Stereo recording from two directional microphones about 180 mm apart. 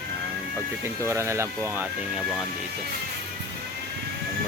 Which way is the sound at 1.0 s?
15° right (ahead or behind).